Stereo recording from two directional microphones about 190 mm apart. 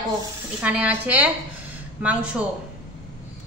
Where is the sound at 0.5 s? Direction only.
5° right (ahead or behind).